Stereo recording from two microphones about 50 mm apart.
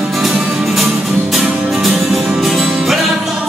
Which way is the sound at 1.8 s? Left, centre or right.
Centre.